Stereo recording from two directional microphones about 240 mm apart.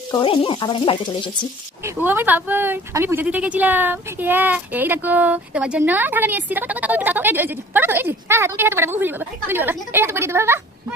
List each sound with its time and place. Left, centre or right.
0.1 s speech: centre
1.8 s speech: centre